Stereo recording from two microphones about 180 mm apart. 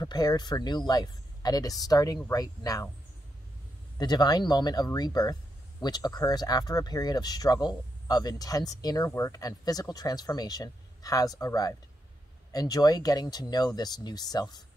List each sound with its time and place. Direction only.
0.0 s speech: 20° left (ahead or behind)
4.0 s speech: 20° left (ahead or behind)